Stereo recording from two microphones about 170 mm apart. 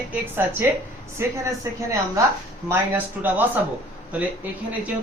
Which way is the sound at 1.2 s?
20° right (ahead or behind).